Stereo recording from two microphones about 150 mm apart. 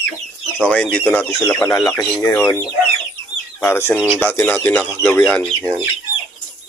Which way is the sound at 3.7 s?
15° left (ahead or behind).